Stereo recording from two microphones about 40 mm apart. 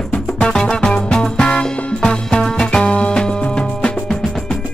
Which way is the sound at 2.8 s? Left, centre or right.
Left.